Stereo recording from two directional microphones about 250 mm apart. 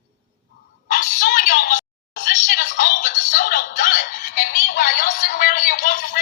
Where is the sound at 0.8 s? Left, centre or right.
Left.